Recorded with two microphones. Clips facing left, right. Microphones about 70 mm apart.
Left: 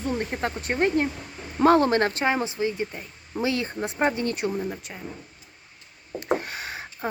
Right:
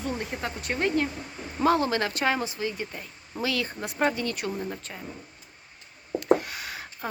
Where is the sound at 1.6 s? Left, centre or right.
Left.